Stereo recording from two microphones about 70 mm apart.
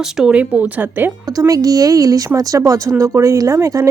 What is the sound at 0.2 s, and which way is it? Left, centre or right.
Speech, centre.